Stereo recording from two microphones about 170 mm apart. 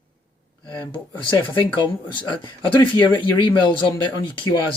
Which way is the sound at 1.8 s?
30° left (ahead or behind).